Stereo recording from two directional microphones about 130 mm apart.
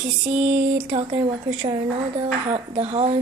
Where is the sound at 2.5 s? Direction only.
45° right (ahead or behind).